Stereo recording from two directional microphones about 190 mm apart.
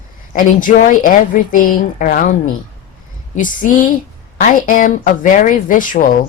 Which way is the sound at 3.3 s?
45° left (ahead or behind).